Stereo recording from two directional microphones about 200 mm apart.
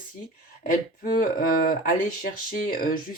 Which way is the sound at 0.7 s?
45° left (ahead or behind).